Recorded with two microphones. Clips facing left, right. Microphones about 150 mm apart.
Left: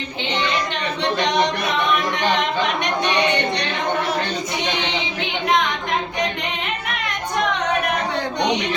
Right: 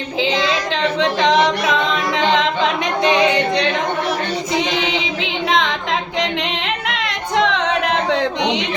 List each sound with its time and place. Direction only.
0.2 s singing: 90° right
4.5 s child singing: 90° right
6.7 s yodeling: 90° right